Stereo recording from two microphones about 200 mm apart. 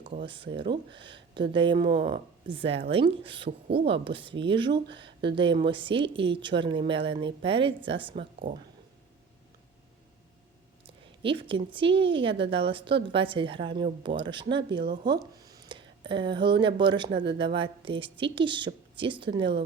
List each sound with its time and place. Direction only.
0.5 s a woman's voice: 25° right (ahead or behind)
10.8 s a woman's voice: 25° right (ahead or behind)
14.8 s speech: 55° right (ahead or behind)
15.4 s a woman's voice: 20° right (ahead or behind)